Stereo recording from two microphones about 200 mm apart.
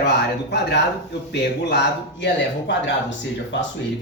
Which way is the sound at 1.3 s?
60° left (ahead or behind).